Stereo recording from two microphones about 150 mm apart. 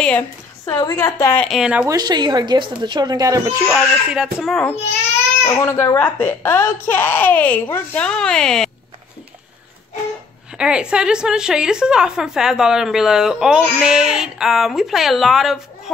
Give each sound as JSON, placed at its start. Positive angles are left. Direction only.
{"t": 0.7, "sound": "a woman's voice", "side_deg": 25}
{"t": 1.4, "sound": "a woman's voice", "side_deg": 0}
{"t": 1.9, "sound": "a woman's voice", "side_deg": -25}
{"t": 3.6, "sound": "a woman's voice", "side_deg": -5}
{"t": 5.4, "sound": "a woman's voice", "side_deg": 20}
{"t": 10.5, "sound": "a woman's voice", "side_deg": -5}